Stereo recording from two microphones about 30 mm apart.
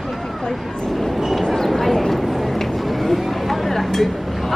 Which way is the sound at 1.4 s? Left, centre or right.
Centre.